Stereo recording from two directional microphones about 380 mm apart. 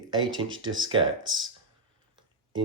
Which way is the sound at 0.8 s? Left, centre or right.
Centre.